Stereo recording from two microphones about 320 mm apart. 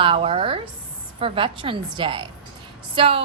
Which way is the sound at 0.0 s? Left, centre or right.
Centre.